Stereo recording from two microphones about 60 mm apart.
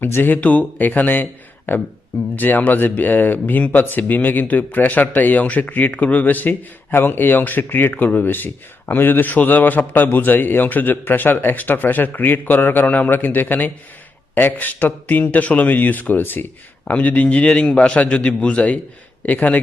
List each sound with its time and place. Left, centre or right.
0.0 s a man's voice: left
16.8 s a man's voice: left